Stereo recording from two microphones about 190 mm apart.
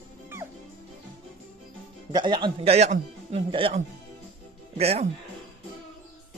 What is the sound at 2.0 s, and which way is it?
A man's voice, 25° right (ahead or behind).